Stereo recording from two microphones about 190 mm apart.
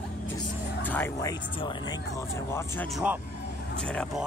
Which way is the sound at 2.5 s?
10° left (ahead or behind).